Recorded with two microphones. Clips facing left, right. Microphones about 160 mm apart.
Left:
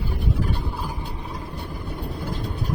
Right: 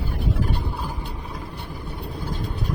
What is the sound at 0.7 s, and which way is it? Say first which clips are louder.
Vehicle: even; 5° left (ahead or behind).